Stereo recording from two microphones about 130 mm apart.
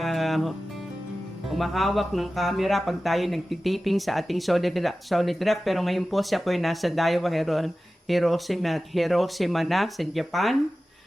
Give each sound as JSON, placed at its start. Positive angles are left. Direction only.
{"t": 0.0, "sound": "music", "side_deg": 0}
{"t": 1.5, "sound": "speech", "side_deg": 0}